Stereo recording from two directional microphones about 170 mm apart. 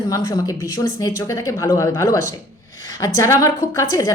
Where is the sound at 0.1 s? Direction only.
20° left (ahead or behind).